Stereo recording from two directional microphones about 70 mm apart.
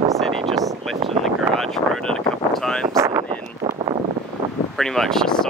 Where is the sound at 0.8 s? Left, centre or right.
Centre.